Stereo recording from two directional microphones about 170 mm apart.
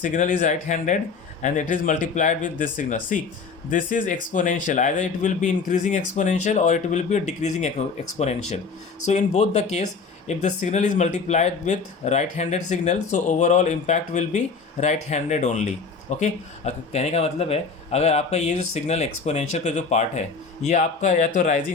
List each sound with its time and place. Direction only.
0.0 s speech: 50° left (ahead or behind)